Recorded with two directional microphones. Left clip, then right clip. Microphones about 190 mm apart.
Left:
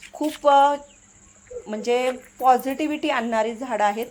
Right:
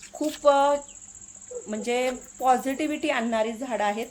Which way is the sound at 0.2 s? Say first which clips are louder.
Left 3 dB; 25° left (ahead or behind).